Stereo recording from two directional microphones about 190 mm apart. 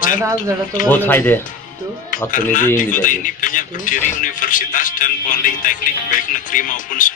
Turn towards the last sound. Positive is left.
turn(degrees=45)  # may be behind; listen again after turning